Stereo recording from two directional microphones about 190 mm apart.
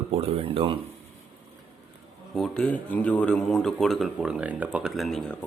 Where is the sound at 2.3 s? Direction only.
5° left (ahead or behind).